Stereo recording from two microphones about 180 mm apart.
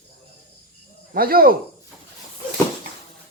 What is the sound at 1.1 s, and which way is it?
Speech, 55° right (ahead or behind).